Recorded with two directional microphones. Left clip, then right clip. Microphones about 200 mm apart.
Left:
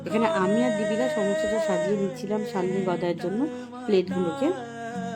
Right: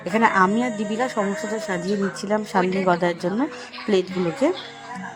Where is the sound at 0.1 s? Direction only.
20° right (ahead or behind).